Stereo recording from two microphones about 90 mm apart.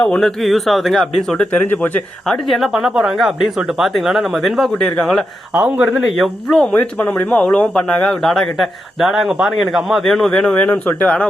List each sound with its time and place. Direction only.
0.0 s speech: 10° left (ahead or behind)
1.5 s speech: 20° left (ahead or behind)
2.2 s speech: 5° left (ahead or behind)
5.5 s a man's voice: 15° right (ahead or behind)
5.9 s speech: centre (ahead or behind)
6.7 s speech: 20° left (ahead or behind)
10.7 s speech: 15° left (ahead or behind)